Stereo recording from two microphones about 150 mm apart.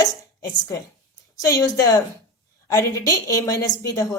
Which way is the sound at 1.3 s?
25° left (ahead or behind).